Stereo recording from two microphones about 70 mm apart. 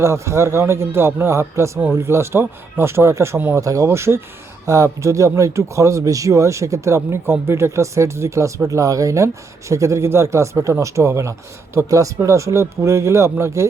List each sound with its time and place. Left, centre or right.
0.0 s speech: right
3.3 s speech: right
3.6 s speech: right
3.8 s speech: right
4.6 s speech: right